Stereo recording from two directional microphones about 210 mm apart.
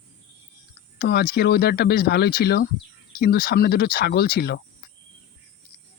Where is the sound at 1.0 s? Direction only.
50° left (ahead or behind).